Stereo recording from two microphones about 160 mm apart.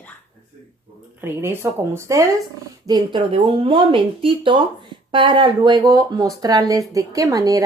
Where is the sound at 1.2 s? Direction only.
15° right (ahead or behind).